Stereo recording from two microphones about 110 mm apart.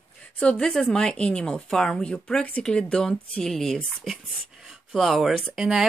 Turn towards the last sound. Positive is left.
turn(degrees=-5)  # may be behind; listen again after turning